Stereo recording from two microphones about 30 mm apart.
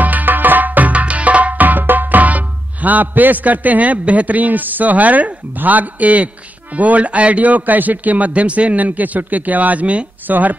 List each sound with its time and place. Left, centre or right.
0.0 s music: right
0.9 s tabla: right
7.1 s speech: right
8.3 s speech: right
10.2 s speech: right